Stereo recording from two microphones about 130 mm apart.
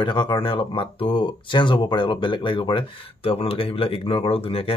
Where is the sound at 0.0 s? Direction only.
35° left (ahead or behind).